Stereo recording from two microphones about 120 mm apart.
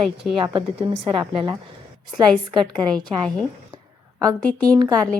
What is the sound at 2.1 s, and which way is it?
Speech, 40° right (ahead or behind).